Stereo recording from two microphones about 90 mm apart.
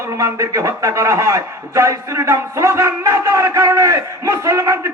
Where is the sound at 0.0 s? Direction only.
35° right (ahead or behind).